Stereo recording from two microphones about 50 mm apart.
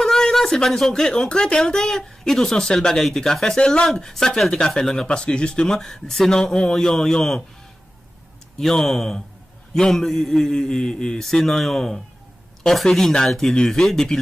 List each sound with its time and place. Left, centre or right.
0.0 s a sound: centre
1.1 s speech: centre
5.0 s speech: centre
5.8 s speech: centre
8.5 s speech: centre